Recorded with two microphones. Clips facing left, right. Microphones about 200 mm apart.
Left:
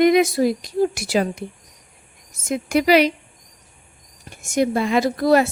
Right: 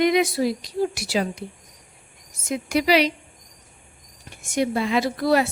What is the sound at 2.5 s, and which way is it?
Speech, 50° left (ahead or behind).